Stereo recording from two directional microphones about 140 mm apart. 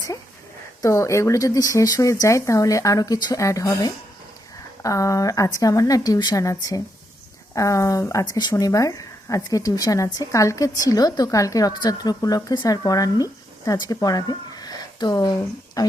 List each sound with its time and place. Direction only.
0.8 s a woman's voice: 20° left (ahead or behind)